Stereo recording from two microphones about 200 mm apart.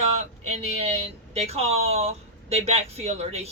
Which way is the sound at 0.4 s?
35° right (ahead or behind).